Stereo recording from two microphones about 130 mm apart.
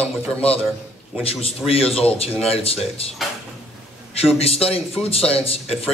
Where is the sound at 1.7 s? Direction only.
50° left (ahead or behind).